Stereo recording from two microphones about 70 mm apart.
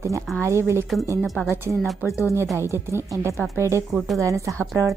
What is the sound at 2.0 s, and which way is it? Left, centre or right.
Speech, left.